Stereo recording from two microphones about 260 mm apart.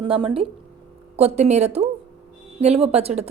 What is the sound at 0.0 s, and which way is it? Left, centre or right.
Speech, centre.